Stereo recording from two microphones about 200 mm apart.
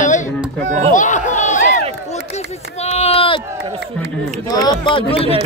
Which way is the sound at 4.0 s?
5° left (ahead or behind).